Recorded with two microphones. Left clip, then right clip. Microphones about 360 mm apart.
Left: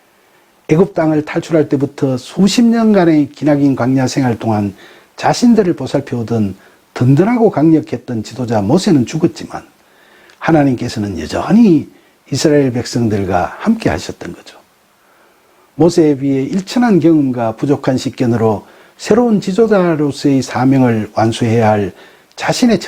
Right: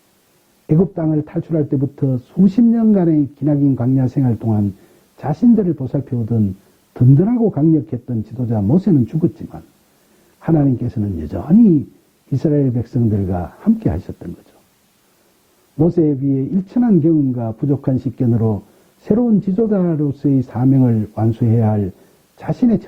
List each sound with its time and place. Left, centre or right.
0.7 s speech: centre
8.8 s speech: centre
15.9 s speech: centre